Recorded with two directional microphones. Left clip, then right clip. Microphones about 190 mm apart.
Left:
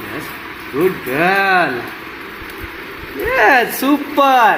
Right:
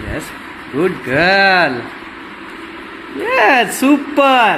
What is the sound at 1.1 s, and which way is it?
Speech, 45° right (ahead or behind).